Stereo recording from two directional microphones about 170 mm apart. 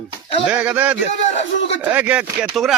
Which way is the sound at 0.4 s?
10° right (ahead or behind).